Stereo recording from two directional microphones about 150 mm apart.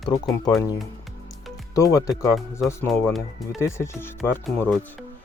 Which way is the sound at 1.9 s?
20° left (ahead or behind).